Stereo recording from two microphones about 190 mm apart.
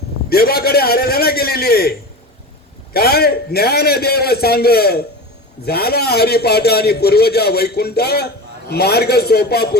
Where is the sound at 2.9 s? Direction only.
55° left (ahead or behind).